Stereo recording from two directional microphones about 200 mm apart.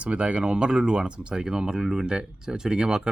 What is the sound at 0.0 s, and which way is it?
Speech, 5° right (ahead or behind).